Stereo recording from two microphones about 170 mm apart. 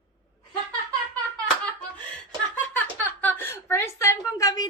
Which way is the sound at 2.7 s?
10° left (ahead or behind).